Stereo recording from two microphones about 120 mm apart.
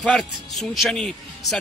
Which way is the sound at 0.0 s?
5° left (ahead or behind).